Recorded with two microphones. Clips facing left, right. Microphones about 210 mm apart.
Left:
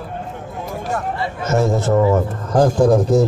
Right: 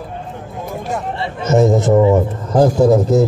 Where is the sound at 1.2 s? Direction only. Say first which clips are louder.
Right 6 dB; 20° right (ahead or behind).